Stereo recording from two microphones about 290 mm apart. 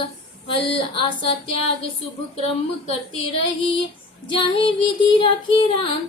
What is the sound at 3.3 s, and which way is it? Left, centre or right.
Child singing, centre.